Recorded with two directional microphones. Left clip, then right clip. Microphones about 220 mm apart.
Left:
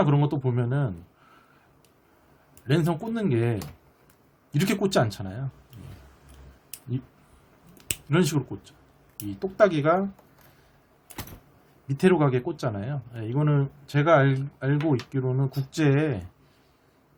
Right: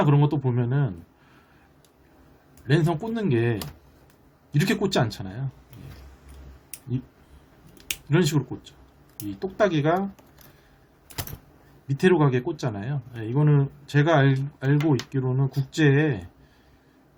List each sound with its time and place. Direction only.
0.0 s speech: 15° left (ahead or behind)
2.6 s speech: 15° left (ahead or behind)
7.9 s speech: 15° left (ahead or behind)
11.9 s speech: 20° left (ahead or behind)